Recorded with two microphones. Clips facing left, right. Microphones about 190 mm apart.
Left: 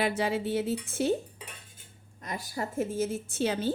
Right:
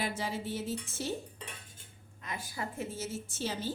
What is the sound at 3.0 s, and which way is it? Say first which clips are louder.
Speech: left 8 dB; 60° left (ahead or behind).